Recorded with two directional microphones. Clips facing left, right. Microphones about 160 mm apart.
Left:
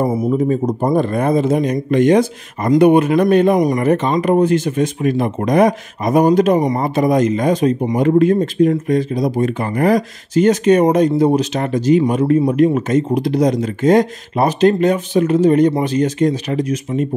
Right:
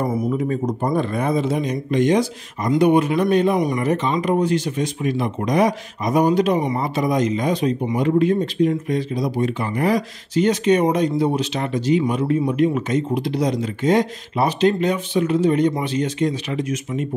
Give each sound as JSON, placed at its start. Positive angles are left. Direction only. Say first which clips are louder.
{"t": 0.0, "sound": "speech", "louder": "left 5 dB", "side_deg": 25}